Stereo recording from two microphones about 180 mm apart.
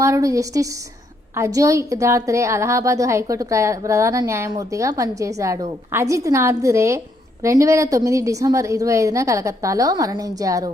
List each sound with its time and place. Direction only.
0.0 s a woman's voice: 20° right (ahead or behind)